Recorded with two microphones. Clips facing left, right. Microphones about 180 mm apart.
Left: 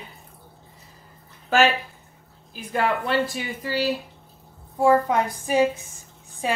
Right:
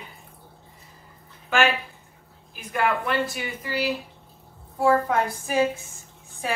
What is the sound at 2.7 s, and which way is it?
Speech, 30° left (ahead or behind).